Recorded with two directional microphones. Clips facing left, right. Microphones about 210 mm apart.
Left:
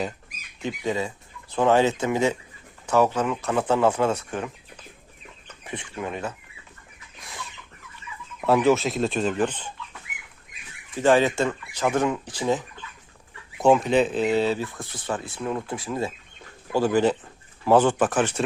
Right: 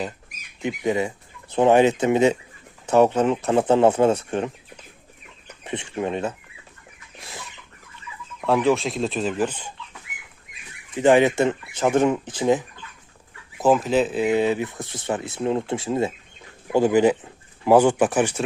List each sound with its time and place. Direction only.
0.6 s speech: 20° right (ahead or behind)
5.6 s speech: 25° right (ahead or behind)
7.2 s chicken: 25° right (ahead or behind)
8.4 s speech: centre (ahead or behind)
10.9 s speech: 20° right (ahead or behind)
13.6 s speech: 5° right (ahead or behind)